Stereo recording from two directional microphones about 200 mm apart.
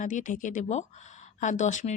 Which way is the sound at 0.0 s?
40° left (ahead or behind).